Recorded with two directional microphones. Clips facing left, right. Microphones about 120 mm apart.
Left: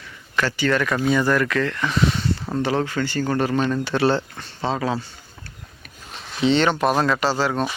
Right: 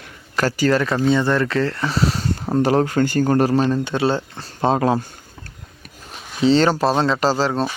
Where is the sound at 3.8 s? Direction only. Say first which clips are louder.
Even; 20° right (ahead or behind).